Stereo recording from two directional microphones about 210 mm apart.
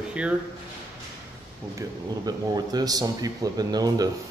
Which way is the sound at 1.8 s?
20° right (ahead or behind).